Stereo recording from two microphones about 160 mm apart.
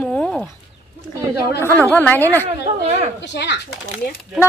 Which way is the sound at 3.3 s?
90° left.